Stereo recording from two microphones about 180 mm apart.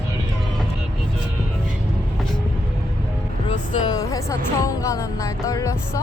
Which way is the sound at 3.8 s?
20° left (ahead or behind).